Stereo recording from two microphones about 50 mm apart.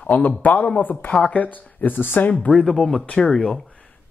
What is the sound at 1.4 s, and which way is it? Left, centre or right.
Speech, left.